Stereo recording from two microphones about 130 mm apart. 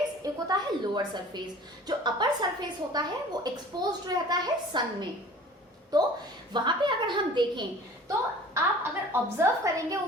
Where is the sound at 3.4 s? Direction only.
30° right (ahead or behind).